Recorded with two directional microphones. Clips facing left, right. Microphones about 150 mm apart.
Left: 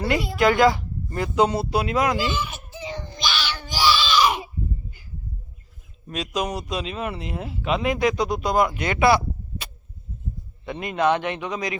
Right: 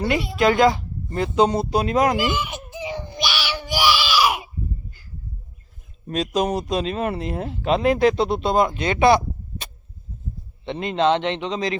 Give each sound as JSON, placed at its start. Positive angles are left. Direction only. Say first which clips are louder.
{"t": 0.0, "sound": "a woman's voice", "louder": "right 1 dB", "side_deg": -25}
{"t": 1.7, "sound": "speech", "louder": "right 3 dB", "side_deg": -40}
{"t": 2.1, "sound": "baby cry", "louder": "right 3 dB", "side_deg": -15}
{"t": 6.1, "sound": "speech", "louder": "right 5 dB", "side_deg": -40}
{"t": 10.7, "sound": "a woman's voice", "louder": "right 2 dB", "side_deg": -25}